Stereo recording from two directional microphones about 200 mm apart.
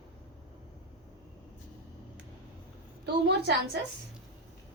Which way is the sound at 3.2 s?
55° right (ahead or behind).